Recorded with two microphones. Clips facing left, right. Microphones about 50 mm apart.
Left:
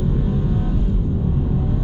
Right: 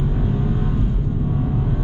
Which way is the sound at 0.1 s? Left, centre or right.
Right.